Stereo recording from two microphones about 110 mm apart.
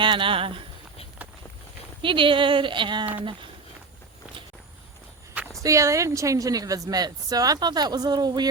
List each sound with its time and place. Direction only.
0.0 s speech: 50° right (ahead or behind)
2.0 s speech: 50° right (ahead or behind)
5.6 s a woman's voice: 30° right (ahead or behind)